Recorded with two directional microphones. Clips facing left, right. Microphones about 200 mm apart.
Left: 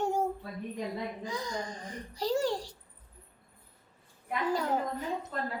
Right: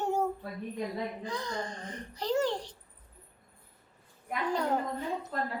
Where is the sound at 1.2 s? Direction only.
10° left (ahead or behind).